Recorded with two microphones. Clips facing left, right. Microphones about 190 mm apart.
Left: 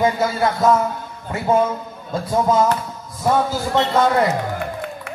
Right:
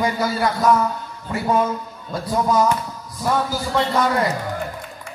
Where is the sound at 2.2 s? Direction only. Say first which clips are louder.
Left 1 dB; 25° left (ahead or behind).